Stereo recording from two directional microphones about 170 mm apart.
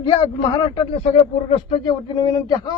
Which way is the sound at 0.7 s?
35° left (ahead or behind).